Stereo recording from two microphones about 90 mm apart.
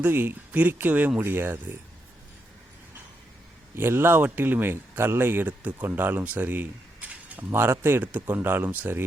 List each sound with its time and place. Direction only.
0.0 s speech: 25° right (ahead or behind)
3.8 s speech: 25° right (ahead or behind)